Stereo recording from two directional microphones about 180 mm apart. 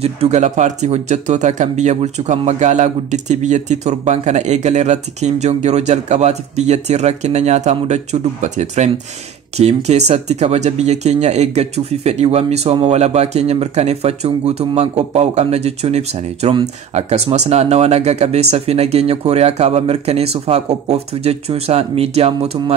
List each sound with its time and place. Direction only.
0.0 s speech: 35° right (ahead or behind)